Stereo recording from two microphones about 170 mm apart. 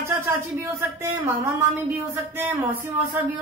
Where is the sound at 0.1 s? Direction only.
15° right (ahead or behind).